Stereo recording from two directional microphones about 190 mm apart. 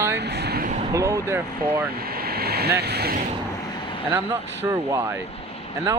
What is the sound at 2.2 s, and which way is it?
Vehicle, 55° right (ahead or behind).